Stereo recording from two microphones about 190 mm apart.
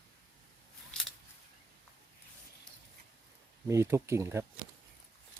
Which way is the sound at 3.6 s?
15° right (ahead or behind).